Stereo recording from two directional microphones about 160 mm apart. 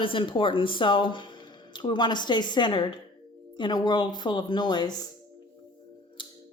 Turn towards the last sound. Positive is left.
turn(degrees=30)  # may be behind; listen again after turning